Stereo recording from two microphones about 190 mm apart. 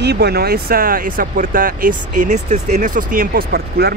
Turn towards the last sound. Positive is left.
turn(degrees=-55)  # may be behind; listen again after turning